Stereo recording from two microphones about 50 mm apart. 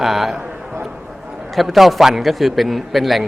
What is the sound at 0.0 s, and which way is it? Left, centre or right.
Speech, centre.